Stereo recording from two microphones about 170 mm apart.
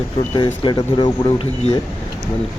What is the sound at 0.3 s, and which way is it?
Speech, 30° left (ahead or behind).